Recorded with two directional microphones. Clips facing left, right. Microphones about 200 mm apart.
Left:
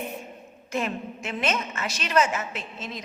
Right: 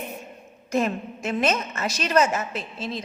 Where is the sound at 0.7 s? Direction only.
40° right (ahead or behind).